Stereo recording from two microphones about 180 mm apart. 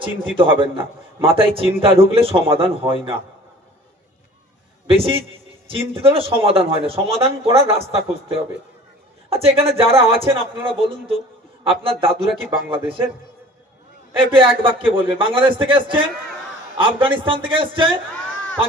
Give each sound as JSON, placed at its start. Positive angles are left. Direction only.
{"t": 0.3, "sound": "speech", "side_deg": -30}
{"t": 4.9, "sound": "a man's voice", "side_deg": -30}
{"t": 14.2, "sound": "a man's voice", "side_deg": -30}